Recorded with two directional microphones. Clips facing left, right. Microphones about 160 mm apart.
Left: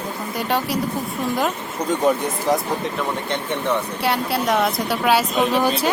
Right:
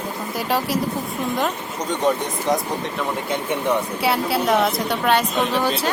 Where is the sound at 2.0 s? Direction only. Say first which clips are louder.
Left 1 dB; 10° left (ahead or behind).